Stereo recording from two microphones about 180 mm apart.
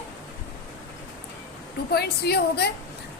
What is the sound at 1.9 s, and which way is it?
Speech, 65° left (ahead or behind).